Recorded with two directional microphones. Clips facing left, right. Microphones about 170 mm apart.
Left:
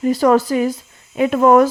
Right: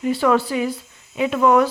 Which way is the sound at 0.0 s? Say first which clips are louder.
Left 4 dB; 40° left (ahead or behind).